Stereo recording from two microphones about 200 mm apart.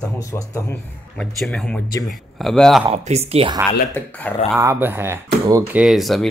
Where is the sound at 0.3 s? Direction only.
15° left (ahead or behind).